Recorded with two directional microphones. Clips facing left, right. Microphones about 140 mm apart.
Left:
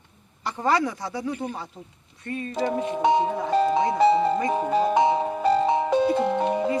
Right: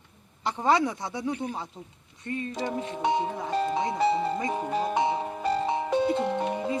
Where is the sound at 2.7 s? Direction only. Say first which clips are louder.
Left 6 dB; 85° left.